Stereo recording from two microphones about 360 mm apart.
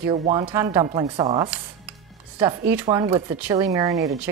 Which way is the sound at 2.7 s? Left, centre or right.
Centre.